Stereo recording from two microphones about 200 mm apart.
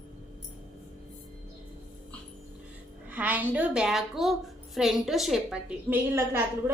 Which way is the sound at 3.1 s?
10° right (ahead or behind).